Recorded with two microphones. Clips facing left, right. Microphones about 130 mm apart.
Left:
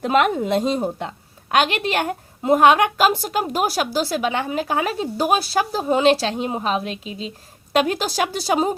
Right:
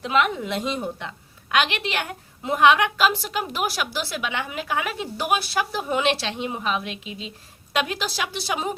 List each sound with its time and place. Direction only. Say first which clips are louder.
0.0 s a woman's voice: left 4 dB; 45° left (ahead or behind)